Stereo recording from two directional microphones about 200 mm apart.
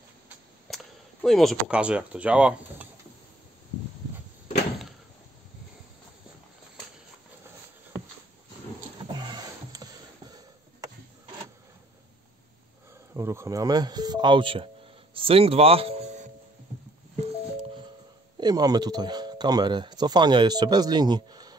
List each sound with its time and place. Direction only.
0.7 s a sound: centre (ahead or behind)
1.2 s speech: centre (ahead or behind)
9.1 s music: 20° right (ahead or behind)
13.1 s speech: 15° right (ahead or behind); by 16.3 s 30° right (ahead or behind)
18.4 s speech: 20° right (ahead or behind)